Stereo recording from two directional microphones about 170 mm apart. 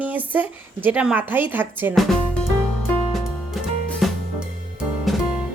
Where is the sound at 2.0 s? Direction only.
Centre (ahead or behind).